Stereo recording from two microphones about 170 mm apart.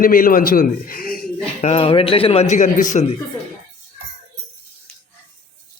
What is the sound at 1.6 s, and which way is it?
Speech, 40° left (ahead or behind).